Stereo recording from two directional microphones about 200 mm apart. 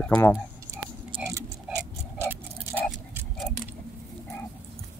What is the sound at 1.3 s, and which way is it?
Clock, 15° right (ahead or behind).